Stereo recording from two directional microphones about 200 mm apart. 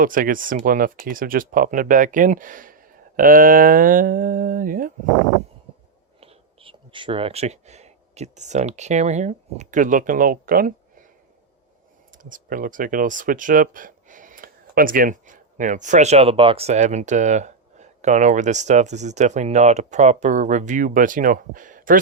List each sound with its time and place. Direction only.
0.0 s speech: 45° right (ahead or behind)
6.1 s speech: 30° right (ahead or behind); by 11.1 s 45° right (ahead or behind)
12.1 s speech: 40° right (ahead or behind)